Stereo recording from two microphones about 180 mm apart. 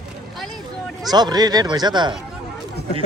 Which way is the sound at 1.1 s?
20° right (ahead or behind).